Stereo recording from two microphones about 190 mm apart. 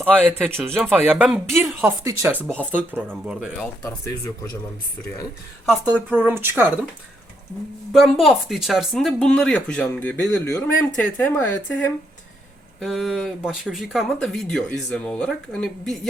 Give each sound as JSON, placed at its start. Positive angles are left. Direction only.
{"t": 0.1, "sound": "speech", "side_deg": -10}
{"t": 1.8, "sound": "speech", "side_deg": -15}
{"t": 3.8, "sound": "speech", "side_deg": 15}
{"t": 5.9, "sound": "speech", "side_deg": -10}
{"t": 7.9, "sound": "speech", "side_deg": 0}
{"t": 12.8, "sound": "speech", "side_deg": 0}